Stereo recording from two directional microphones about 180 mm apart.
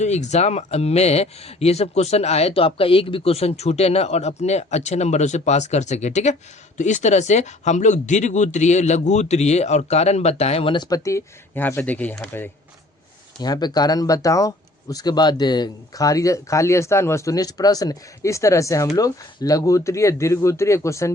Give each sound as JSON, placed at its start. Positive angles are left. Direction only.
{"t": 0.0, "sound": "speech", "side_deg": 40}
{"t": 13.4, "sound": "speech", "side_deg": 20}